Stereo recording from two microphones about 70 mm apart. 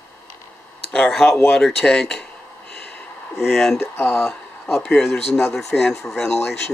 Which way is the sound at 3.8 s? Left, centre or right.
Left.